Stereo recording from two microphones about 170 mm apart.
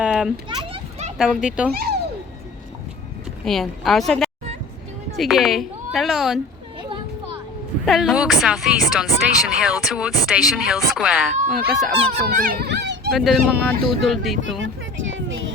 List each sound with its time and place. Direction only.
0.0 s children playing: 5° right (ahead or behind)
0.4 s children playing: 30° right (ahead or behind)
1.2 s speech: 5° right (ahead or behind)
1.7 s speech: 65° right (ahead or behind)
3.4 s speech: centre (ahead or behind)
6.7 s children playing: 30° right (ahead or behind)
7.9 s speech: centre (ahead or behind)
12.3 s speech: 65° right (ahead or behind); by 13.0 s 85° right
13.1 s speech: centre (ahead or behind)
14.6 s a sound: 90° right